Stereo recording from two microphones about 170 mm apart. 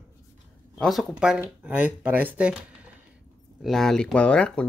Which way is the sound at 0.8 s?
Centre (ahead or behind).